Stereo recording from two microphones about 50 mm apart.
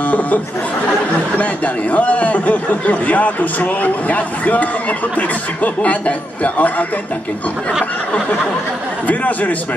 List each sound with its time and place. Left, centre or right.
0.0 s speech: left
9.0 s speech: left